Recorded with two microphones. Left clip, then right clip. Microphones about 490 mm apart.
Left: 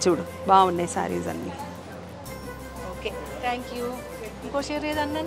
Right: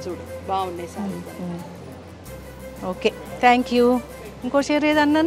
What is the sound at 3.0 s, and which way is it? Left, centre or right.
Speech, right.